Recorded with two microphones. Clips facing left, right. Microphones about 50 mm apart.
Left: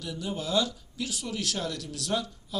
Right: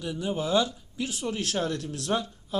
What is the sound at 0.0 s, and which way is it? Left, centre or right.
Speech, right.